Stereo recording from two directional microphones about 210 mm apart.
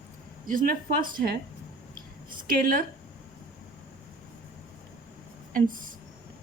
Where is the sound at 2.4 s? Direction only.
45° right (ahead or behind).